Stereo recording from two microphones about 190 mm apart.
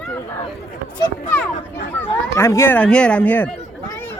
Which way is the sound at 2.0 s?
15° left (ahead or behind).